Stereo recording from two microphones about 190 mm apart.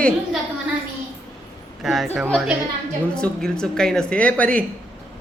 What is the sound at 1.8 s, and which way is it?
Speech, centre (ahead or behind).